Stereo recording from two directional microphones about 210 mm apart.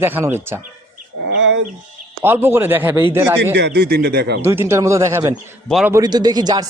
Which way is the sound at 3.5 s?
50° right (ahead or behind).